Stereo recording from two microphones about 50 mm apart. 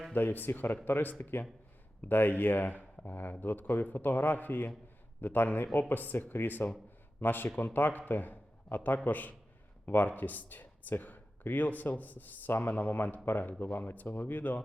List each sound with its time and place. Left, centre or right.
0.1 s a man's voice: left